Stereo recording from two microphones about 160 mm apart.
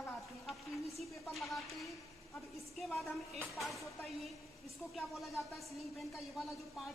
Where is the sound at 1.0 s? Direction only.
Centre (ahead or behind).